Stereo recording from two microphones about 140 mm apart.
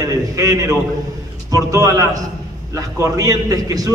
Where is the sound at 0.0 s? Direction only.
25° right (ahead or behind).